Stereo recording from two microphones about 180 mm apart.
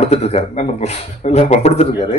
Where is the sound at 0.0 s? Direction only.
35° left (ahead or behind).